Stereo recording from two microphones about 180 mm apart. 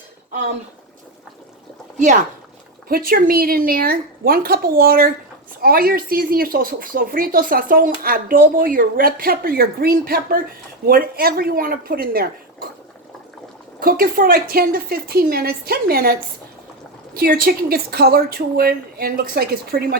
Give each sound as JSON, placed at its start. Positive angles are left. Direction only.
{"t": 2.9, "sound": "a woman's voice", "side_deg": -55}
{"t": 13.7, "sound": "a woman's voice", "side_deg": -55}
{"t": 17.2, "sound": "a woman's voice", "side_deg": -55}